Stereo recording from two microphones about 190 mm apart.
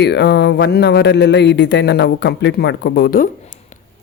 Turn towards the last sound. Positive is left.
turn(degrees=40)  # may be behind; listen again after turning